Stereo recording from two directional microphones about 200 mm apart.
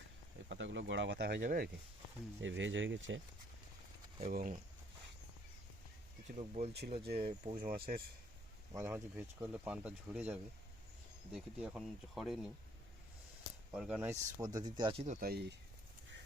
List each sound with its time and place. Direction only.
0.4 s speech: 65° right (ahead or behind); by 1.7 s 45° right (ahead or behind)
2.4 s speech: 70° right (ahead or behind)
4.2 s speech: 40° right (ahead or behind)
6.2 s speech: 35° right (ahead or behind)
6.7 s speech: 50° right (ahead or behind)
7.2 s speech: 30° right (ahead or behind)
7.5 s speech: 45° right (ahead or behind)
8.7 s speech: 10° right (ahead or behind)
13.7 s speech: 5° right (ahead or behind); by 15.0 s 20° right (ahead or behind)
15.0 s speech: 45° right (ahead or behind)